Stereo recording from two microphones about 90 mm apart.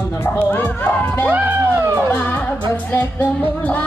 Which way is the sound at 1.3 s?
20° right (ahead or behind).